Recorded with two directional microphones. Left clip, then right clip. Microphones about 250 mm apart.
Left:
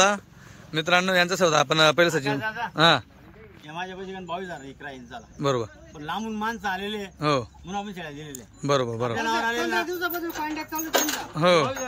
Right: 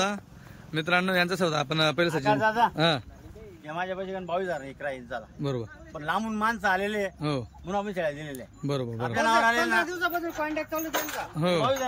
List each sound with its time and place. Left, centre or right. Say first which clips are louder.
0.7 s speech: left 4 dB; centre
2.3 s a man's voice: right 6 dB; right
2.7 s speech: left 6 dB; centre
3.6 s speech: right 2 dB; centre
5.4 s speech: left 9 dB; centre
5.9 s a man's voice: right 2 dB; centre
7.2 s speech: left 8 dB; centre
7.6 s a man's voice: right 5 dB; centre
8.6 s speech: left 8 dB; centre
9.1 s speech: right 6 dB; right; by 11.6 s centre